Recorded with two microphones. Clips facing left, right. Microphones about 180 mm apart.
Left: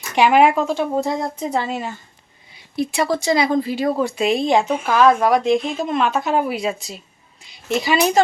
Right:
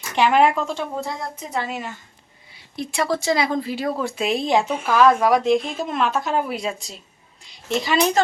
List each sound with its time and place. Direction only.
0.2 s speech: 10° left (ahead or behind)
1.4 s speech: 30° left (ahead or behind)
2.7 s speech: 5° left (ahead or behind)